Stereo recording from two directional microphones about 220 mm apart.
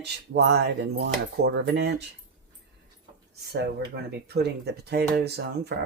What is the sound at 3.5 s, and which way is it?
Speech, 50° right (ahead or behind).